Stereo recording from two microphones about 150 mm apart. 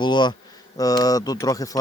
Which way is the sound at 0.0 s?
30° left (ahead or behind).